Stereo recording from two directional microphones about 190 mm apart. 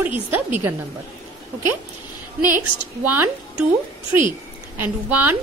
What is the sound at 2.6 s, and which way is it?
Speech, 10° right (ahead or behind).